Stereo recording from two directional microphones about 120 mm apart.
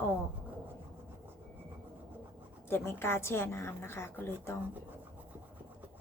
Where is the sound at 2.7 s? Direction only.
20° left (ahead or behind).